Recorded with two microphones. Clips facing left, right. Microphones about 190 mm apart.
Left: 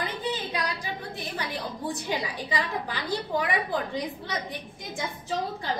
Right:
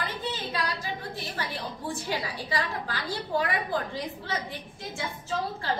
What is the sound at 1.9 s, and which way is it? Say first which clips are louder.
A woman's voice: left 1 dB; 20° left (ahead or behind).